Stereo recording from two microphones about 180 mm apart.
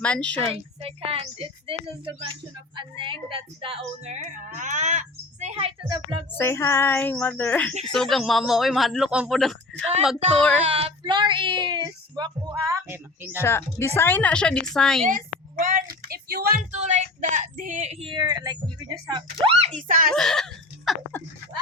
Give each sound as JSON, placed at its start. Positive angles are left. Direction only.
{"t": 0.0, "sound": "a woman's voice", "side_deg": 5}
{"t": 0.5, "sound": "a woman's voice", "side_deg": -30}
{"t": 6.3, "sound": "a woman's voice", "side_deg": 15}
{"t": 10.7, "sound": "child singing", "side_deg": -35}
{"t": 12.9, "sound": "a woman's voice", "side_deg": -10}
{"t": 13.4, "sound": "a woman's voice", "side_deg": 15}
{"t": 15.0, "sound": "speech", "side_deg": -50}
{"t": 16.7, "sound": "a woman's voice", "side_deg": -40}
{"t": 20.1, "sound": "a sound", "side_deg": 5}